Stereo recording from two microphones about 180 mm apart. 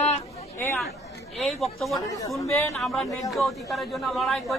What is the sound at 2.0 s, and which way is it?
Speech, 20° left (ahead or behind).